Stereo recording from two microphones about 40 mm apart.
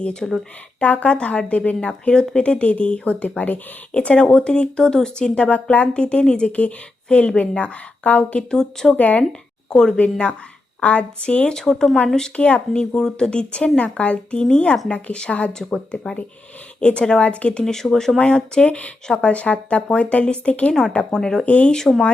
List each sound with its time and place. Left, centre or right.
0.0 s speech: left
1.9 s a woman's voice: left
3.9 s a woman's voice: left
8.4 s speech: centre
9.0 s a woman's voice: left
9.6 s speech: centre
10.0 s a woman's voice: left
11.4 s speech: centre
12.4 s a woman's voice: left
16.8 s a woman's voice: left
17.6 s speech: centre
18.2 s a woman's voice: left
21.0 s speech: centre
21.4 s a woman's voice: left